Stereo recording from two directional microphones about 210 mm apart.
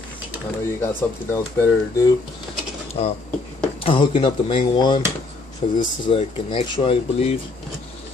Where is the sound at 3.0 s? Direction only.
30° left (ahead or behind).